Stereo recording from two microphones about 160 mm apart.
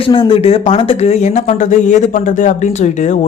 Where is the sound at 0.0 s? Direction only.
35° left (ahead or behind).